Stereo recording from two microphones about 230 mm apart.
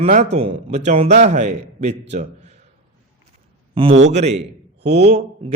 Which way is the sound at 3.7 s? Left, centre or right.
Right.